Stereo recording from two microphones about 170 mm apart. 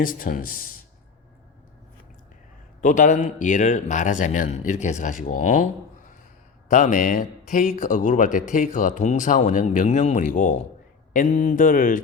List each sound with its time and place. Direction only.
0.0 s speech: 55° left (ahead or behind)
2.8 s speech: 50° left (ahead or behind)
6.7 s speech: 50° left (ahead or behind)